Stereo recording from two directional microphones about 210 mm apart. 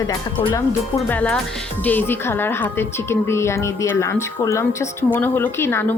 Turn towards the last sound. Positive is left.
turn(degrees=10)  # may be behind; listen again after turning